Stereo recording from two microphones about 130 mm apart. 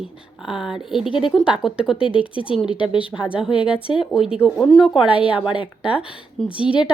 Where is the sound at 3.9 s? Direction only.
5° right (ahead or behind).